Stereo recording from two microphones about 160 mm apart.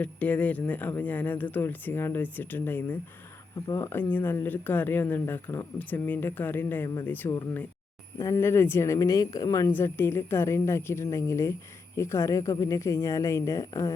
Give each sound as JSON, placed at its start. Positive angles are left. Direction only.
{"t": 0.0, "sound": "speech", "side_deg": 10}